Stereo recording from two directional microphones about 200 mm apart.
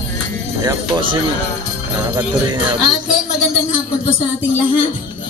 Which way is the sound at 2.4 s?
20° right (ahead or behind).